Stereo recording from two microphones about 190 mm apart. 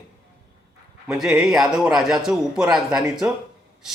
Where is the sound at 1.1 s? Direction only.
5° right (ahead or behind).